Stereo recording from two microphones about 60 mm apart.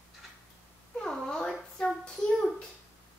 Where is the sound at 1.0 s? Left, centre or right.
Centre.